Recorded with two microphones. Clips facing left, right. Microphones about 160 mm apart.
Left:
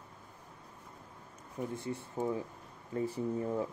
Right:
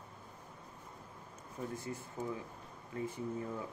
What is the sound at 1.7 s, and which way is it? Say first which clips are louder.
Speech: left 4 dB; 30° left (ahead or behind).